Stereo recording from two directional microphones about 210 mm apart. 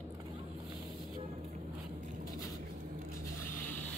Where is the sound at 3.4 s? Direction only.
10° left (ahead or behind).